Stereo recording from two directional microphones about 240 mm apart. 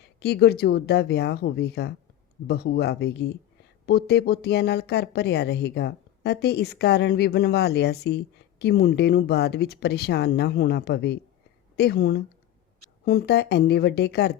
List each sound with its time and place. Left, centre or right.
0.2 s speech: left